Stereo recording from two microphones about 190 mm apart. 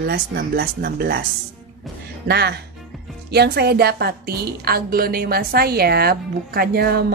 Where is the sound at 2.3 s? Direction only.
60° right (ahead or behind).